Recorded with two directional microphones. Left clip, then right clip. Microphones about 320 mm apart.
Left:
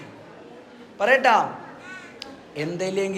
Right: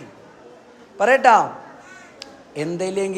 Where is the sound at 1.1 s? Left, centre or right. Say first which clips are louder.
Right 4 dB; right.